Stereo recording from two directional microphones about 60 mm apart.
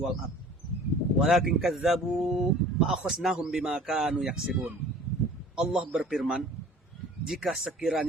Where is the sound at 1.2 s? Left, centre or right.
Centre.